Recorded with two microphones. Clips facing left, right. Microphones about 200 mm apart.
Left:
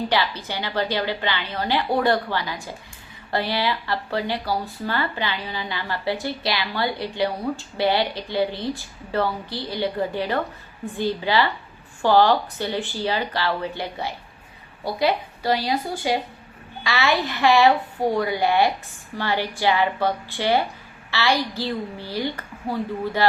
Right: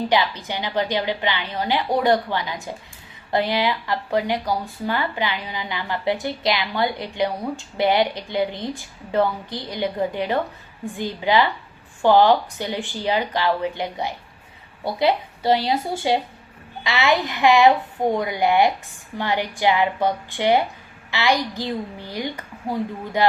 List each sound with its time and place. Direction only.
0.1 s a woman's voice: 15° right (ahead or behind)